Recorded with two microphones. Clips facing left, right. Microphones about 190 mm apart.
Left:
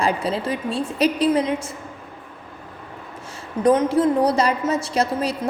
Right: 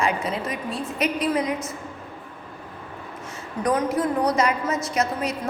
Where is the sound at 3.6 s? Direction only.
25° left (ahead or behind).